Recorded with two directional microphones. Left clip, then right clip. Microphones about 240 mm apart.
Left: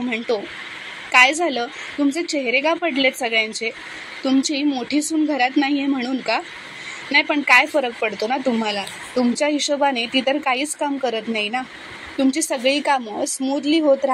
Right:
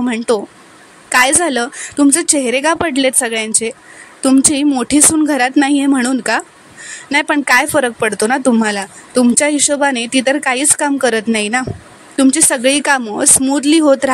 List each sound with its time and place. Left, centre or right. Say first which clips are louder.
1.1 s speech: right 3 dB; right